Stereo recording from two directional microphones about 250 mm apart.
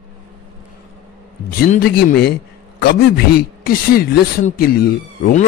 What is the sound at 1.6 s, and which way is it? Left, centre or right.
Speech, left.